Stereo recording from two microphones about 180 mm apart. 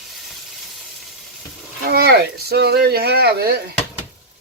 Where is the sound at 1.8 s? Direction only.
60° right (ahead or behind).